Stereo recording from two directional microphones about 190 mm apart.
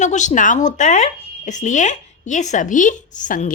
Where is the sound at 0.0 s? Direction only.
40° left (ahead or behind).